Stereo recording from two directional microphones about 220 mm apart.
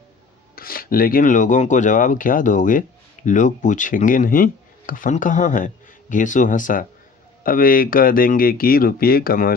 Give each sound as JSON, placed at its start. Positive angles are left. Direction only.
{"t": 0.5, "sound": "speech", "side_deg": 40}